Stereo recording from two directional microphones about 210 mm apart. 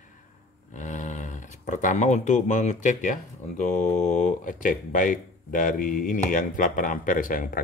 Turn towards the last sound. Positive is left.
turn(degrees=40)  # may be behind; listen again after turning